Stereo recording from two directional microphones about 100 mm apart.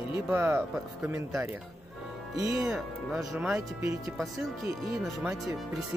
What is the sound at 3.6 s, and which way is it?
Speech, 30° right (ahead or behind).